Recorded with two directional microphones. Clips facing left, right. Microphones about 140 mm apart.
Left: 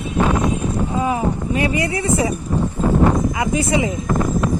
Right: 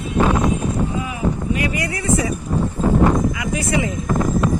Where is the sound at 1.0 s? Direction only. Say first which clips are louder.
Left 2 dB; 35° left (ahead or behind).